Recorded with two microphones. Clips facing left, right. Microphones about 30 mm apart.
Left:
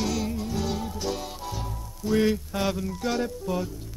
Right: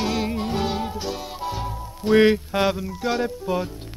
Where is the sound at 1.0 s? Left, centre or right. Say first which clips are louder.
Right 2 dB; centre.